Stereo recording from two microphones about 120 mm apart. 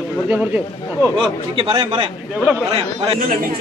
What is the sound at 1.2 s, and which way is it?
Speech, 45° right (ahead or behind).